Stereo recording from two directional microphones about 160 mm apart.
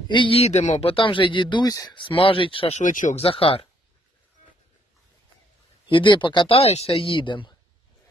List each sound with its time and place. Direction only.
0.1 s speech: 35° left (ahead or behind)
2.8 s speech: 55° left (ahead or behind)
3.2 s speech: 35° left (ahead or behind)
5.9 s speech: 30° left (ahead or behind)